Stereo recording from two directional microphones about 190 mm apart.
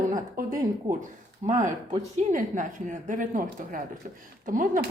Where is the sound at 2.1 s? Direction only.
40° right (ahead or behind).